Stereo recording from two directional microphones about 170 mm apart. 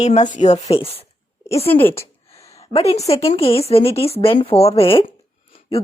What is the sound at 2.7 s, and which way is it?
Speech, 35° left (ahead or behind).